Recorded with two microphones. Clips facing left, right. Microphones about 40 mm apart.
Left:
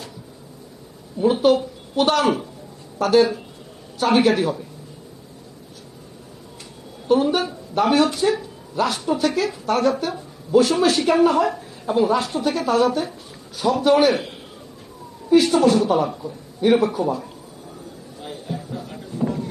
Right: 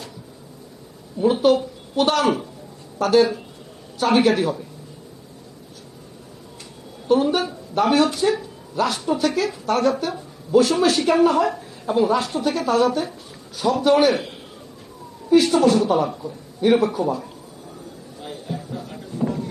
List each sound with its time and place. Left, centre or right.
1.2 s speech: centre
7.1 s speech: centre
18.2 s a sound: centre